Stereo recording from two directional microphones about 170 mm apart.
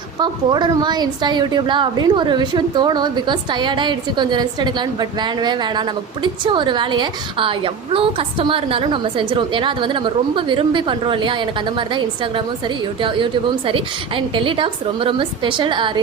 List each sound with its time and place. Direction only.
0.2 s a woman's voice: 25° right (ahead or behind)